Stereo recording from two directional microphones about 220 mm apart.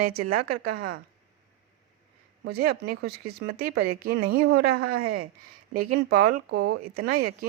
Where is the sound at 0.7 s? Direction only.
75° right (ahead or behind).